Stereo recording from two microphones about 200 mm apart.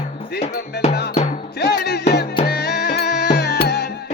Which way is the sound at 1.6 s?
50° left (ahead or behind).